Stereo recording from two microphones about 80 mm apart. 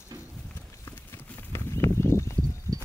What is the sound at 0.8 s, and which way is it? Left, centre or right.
Horse, left.